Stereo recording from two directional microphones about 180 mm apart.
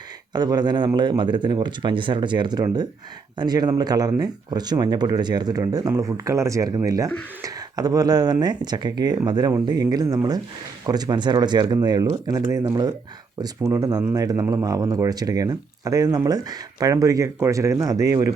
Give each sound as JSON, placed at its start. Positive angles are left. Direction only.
{"t": 0.3, "sound": "speech", "side_deg": -25}